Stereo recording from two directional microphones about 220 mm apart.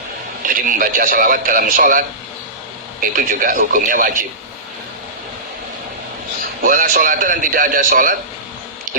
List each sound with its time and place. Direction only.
0.4 s a man's voice: 40° right (ahead or behind)
6.6 s a man's voice: 40° right (ahead or behind)